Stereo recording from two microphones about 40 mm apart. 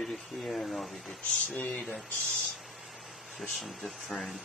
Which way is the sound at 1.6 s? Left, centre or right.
Left.